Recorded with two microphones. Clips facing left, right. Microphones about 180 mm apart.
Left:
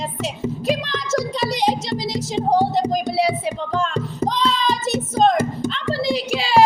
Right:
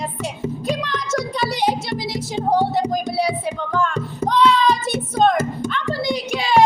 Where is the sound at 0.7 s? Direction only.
25° left (ahead or behind).